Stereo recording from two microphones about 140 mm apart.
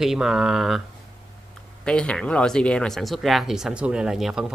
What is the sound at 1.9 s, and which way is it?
Speech, 5° left (ahead or behind).